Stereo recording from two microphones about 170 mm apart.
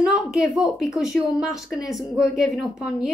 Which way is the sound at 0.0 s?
Centre (ahead or behind).